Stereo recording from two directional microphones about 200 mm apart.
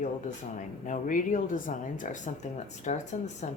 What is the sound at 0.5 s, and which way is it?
Speech, 40° left (ahead or behind).